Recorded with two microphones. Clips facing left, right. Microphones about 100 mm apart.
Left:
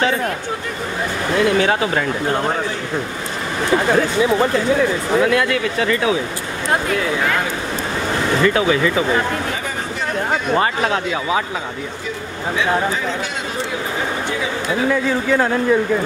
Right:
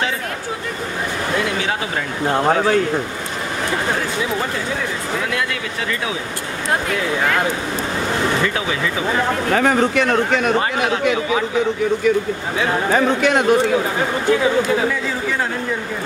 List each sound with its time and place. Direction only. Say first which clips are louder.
9.5 s speech: right 9 dB; 70° right (ahead or behind)
12.9 s speech: right 8 dB; 65° right (ahead or behind)